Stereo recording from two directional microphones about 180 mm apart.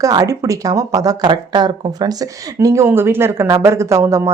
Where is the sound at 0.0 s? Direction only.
20° right (ahead or behind).